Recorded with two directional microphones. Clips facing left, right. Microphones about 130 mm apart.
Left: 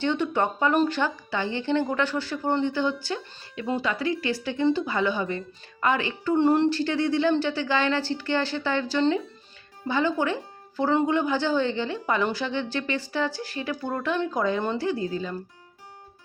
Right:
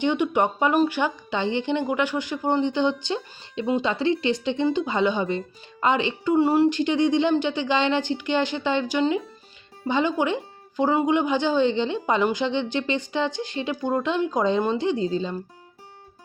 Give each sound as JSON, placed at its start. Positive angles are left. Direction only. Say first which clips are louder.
{"t": 0.0, "sound": "speech", "louder": "right 3 dB", "side_deg": -15}
{"t": 6.3, "sound": "speech", "louder": "right 1 dB", "side_deg": -10}